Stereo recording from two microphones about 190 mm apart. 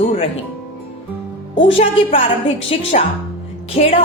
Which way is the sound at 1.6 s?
30° left (ahead or behind).